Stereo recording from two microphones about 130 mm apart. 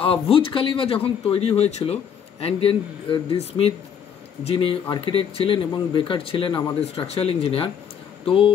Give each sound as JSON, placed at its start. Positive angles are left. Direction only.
{"t": 0.0, "sound": "speech", "side_deg": 45}